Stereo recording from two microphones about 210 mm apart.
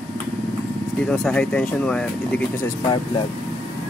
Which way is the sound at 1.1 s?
5° left (ahead or behind).